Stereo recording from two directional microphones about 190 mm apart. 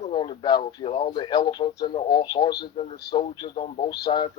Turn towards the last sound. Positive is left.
turn(degrees=25)  # may be behind; listen again after turning